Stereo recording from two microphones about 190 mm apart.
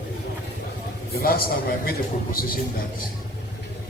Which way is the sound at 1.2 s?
50° left (ahead or behind).